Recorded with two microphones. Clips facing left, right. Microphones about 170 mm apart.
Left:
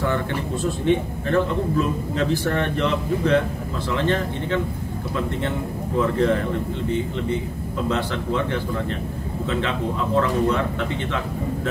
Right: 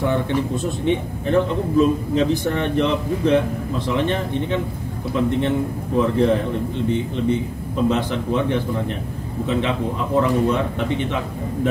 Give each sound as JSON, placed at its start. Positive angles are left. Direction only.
{"t": 0.0, "sound": "speech", "side_deg": -15}
{"t": 5.9, "sound": "a man's voice", "side_deg": -20}
{"t": 7.9, "sound": "speech", "side_deg": -20}